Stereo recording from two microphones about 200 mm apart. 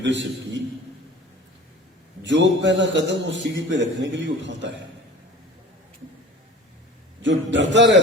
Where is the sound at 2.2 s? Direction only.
65° right (ahead or behind).